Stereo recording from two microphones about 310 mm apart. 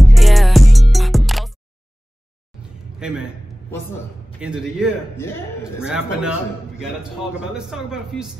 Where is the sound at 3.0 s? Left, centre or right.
Centre.